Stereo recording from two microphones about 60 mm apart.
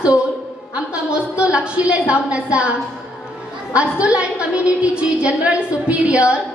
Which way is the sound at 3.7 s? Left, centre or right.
Centre.